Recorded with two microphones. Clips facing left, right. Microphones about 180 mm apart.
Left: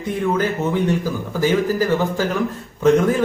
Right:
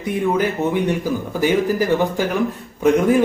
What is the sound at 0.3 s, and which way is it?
Speech, 15° right (ahead or behind).